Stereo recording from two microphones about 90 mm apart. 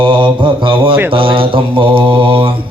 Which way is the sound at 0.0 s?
65° right (ahead or behind).